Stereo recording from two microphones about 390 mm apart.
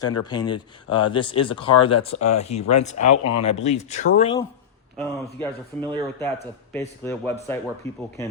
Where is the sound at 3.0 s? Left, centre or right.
Left.